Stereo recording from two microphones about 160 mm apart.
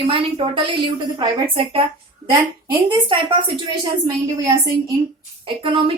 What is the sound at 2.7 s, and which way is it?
Speech, 30° right (ahead or behind).